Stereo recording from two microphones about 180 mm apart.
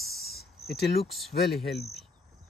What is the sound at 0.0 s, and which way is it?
Cricket, centre (ahead or behind).